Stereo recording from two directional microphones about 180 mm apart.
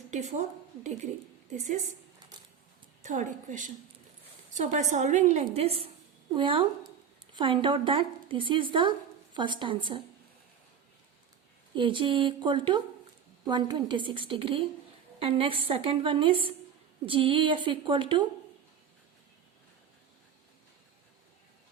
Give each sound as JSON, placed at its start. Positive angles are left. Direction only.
{"t": 0.1, "sound": "a woman's voice", "side_deg": -40}
{"t": 1.5, "sound": "a woman's voice", "side_deg": -40}
{"t": 3.0, "sound": "a woman's voice", "side_deg": -45}
{"t": 11.7, "sound": "speech", "side_deg": -25}